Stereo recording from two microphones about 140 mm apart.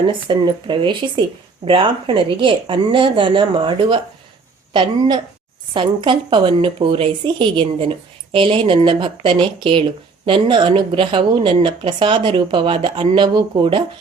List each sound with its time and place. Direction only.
0.0 s a woman's voice: 35° right (ahead or behind)